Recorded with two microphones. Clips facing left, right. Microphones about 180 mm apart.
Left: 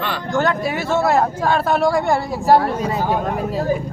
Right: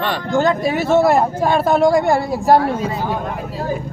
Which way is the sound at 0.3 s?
20° right (ahead or behind).